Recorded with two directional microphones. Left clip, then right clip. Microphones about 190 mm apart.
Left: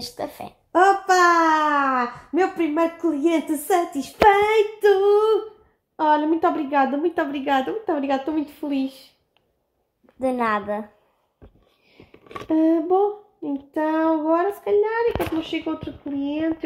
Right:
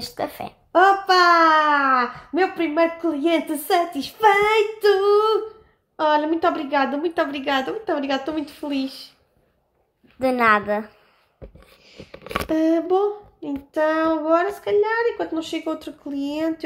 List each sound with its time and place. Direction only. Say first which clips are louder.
0.0 s a sound: right 3 dB; 10° right (ahead or behind)
0.7 s oink: right 1 dB; 30° left (ahead or behind)
1.3 s a sound: right 3 dB; 40° left (ahead or behind)
2.8 s a woman's voice: right 2 dB; 30° left (ahead or behind)
10.1 s a woman's voice: right 5 dB; 5° right (ahead or behind)
12.4 s a woman's voice: left 1 dB; 40° left (ahead or behind)
15.5 s speech: even; 20° left (ahead or behind)